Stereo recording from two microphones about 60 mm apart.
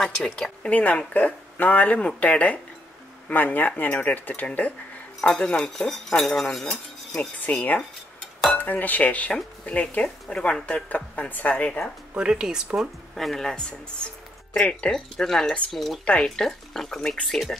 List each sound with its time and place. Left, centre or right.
0.0 s speech: centre
5.6 s speech: centre
7.2 s speech: left
10.0 s speech: centre
12.2 s speech: centre
13.1 s speech: centre